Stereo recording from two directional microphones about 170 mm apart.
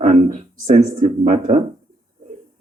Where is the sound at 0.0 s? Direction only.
45° right (ahead or behind).